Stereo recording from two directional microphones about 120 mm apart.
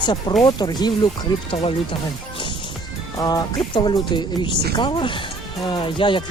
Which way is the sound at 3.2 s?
30° left (ahead or behind).